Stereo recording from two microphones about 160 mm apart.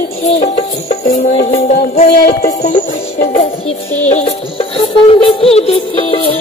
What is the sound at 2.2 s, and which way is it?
Music, 70° left (ahead or behind).